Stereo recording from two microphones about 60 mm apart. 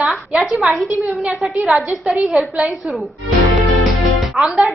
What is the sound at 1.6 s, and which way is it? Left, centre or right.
Speech, centre.